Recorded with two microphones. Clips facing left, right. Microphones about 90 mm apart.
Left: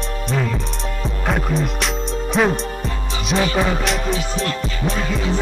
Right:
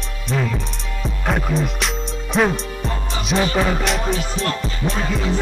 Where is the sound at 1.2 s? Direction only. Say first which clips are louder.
Even; centre (ahead or behind).